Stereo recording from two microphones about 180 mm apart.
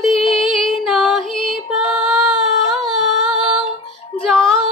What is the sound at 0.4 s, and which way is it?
Music, centre (ahead or behind).